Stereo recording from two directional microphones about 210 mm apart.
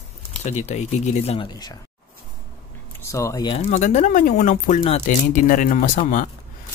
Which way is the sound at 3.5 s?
35° left (ahead or behind).